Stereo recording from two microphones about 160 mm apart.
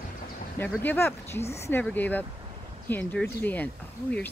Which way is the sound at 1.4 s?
40° left (ahead or behind).